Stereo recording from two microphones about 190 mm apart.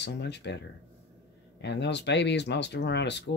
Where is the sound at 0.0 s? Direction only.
65° left (ahead or behind).